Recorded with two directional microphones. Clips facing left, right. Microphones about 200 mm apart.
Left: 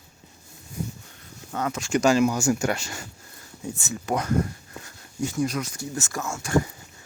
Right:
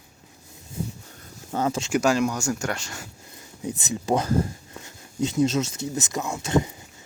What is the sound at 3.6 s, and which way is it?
Speech, 20° right (ahead or behind).